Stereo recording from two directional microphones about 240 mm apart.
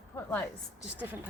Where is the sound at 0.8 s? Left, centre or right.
Centre.